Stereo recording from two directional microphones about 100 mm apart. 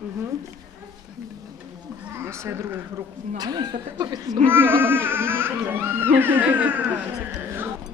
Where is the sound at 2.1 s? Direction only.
25° right (ahead or behind).